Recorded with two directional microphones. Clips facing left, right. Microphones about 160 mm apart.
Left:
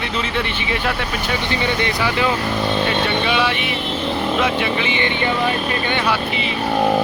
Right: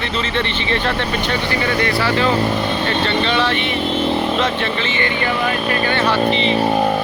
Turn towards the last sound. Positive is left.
turn(degrees=10)  # may be behind; listen again after turning